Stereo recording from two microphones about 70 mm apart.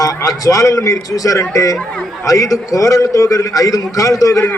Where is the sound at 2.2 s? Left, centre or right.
Left.